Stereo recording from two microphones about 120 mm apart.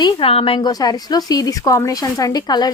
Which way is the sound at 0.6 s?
35° left (ahead or behind).